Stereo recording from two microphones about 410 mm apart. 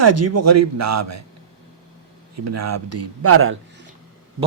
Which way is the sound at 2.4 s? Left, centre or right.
Right.